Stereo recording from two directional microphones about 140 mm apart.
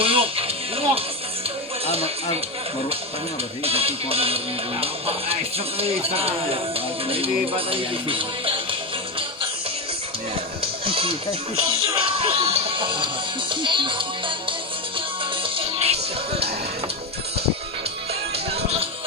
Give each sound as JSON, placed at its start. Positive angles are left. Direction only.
{"t": 0.0, "sound": "music", "side_deg": -40}
{"t": 1.9, "sound": "speech", "side_deg": -45}
{"t": 3.6, "sound": "speech", "side_deg": -45}
{"t": 10.8, "sound": "music", "side_deg": -40}
{"t": 11.5, "sound": "speech", "side_deg": -40}
{"t": 15.4, "sound": "music", "side_deg": -40}
{"t": 18.1, "sound": "music", "side_deg": -45}